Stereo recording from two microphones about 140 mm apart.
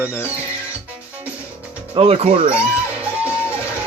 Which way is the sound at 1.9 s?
45° right (ahead or behind).